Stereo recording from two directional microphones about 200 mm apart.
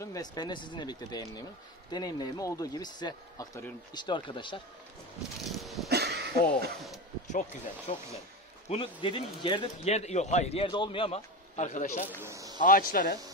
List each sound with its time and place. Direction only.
0.0 s speech: 20° left (ahead or behind)
5.4 s a sound: centre (ahead or behind)
5.9 s a sound: 55° right (ahead or behind)
7.2 s speech: 35° left (ahead or behind)
12.2 s speech: 15° right (ahead or behind)
12.5 s speech: 45° left (ahead or behind)